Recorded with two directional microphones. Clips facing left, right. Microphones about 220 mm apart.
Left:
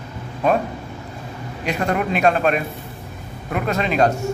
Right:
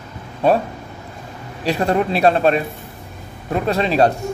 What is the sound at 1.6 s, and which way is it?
Speech, 30° right (ahead or behind).